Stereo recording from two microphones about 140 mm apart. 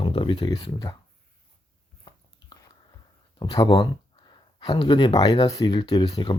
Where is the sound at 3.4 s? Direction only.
30° left (ahead or behind).